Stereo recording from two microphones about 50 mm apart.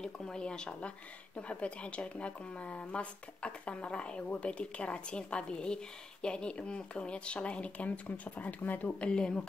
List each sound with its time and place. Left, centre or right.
0.0 s speech: centre; by 9.1 s left
9.1 s speech: centre